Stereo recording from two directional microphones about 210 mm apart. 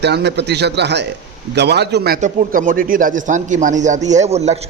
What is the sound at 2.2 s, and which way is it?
Speech, 40° right (ahead or behind).